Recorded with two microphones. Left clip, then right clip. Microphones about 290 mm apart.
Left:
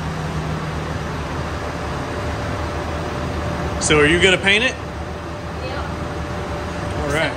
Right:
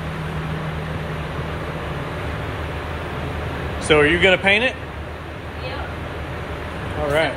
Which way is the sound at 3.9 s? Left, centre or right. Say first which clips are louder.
Even; centre.